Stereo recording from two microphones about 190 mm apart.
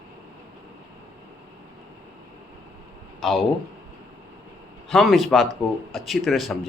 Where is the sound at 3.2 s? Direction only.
Centre (ahead or behind).